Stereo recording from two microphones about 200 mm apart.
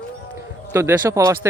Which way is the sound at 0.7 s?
15° right (ahead or behind).